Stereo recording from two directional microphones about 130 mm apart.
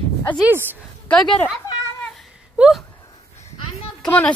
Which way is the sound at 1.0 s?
5° left (ahead or behind).